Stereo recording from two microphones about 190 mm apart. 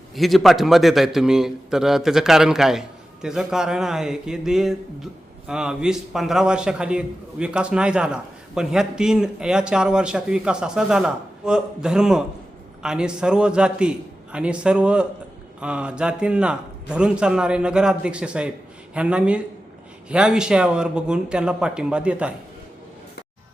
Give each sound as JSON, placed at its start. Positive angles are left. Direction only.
{"t": 0.2, "sound": "a man's voice", "side_deg": 0}